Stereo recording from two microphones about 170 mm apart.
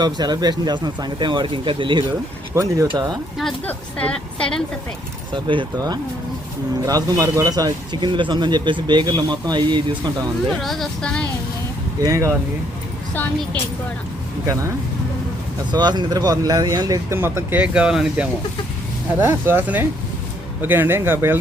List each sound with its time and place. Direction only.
0.0 s speech: 25° right (ahead or behind)
3.3 s a woman's voice: 5° left (ahead or behind)
5.3 s speech: 30° right (ahead or behind)
10.6 s a woman's voice: centre (ahead or behind)
11.9 s speech: 20° right (ahead or behind)
14.4 s speech: 20° right (ahead or behind)
15.7 s speech: 25° right (ahead or behind)